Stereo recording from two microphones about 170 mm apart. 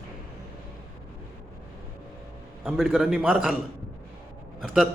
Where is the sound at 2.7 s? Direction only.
5° right (ahead or behind).